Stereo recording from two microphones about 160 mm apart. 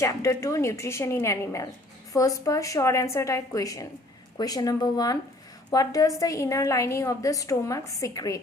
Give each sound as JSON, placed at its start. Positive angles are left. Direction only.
{"t": 0.0, "sound": "a woman's voice", "side_deg": 20}